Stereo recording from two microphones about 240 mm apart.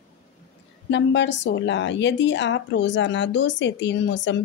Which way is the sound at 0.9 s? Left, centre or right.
Left.